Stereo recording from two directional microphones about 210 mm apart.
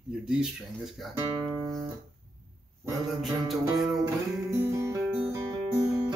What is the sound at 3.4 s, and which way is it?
Music, centre (ahead or behind).